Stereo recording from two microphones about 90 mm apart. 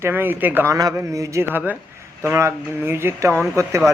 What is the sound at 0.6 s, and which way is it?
Speech, 40° right (ahead or behind).